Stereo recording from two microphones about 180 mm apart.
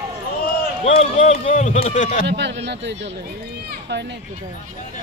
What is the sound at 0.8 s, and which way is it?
Speech, 35° left (ahead or behind).